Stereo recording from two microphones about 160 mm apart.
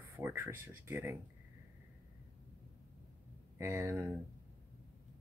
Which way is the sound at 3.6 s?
15° right (ahead or behind).